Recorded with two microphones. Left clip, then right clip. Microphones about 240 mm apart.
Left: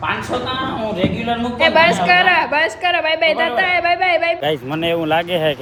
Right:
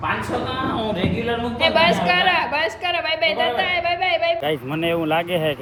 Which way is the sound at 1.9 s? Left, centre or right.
Left.